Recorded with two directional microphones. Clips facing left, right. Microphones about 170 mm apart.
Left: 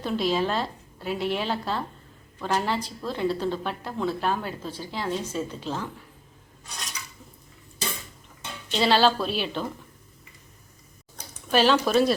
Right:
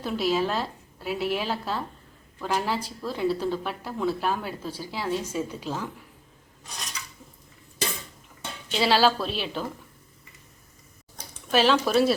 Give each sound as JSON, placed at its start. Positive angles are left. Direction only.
{"t": 0.0, "sound": "a woman's voice", "side_deg": -5}
{"t": 8.7, "sound": "a woman's voice", "side_deg": -5}
{"t": 11.5, "sound": "a woman's voice", "side_deg": 0}